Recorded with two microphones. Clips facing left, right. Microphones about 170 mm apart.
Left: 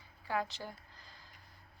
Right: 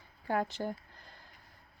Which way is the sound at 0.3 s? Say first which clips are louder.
Right 5 dB; 50° right (ahead or behind).